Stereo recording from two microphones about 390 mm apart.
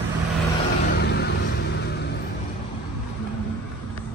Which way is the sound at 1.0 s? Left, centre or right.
Left.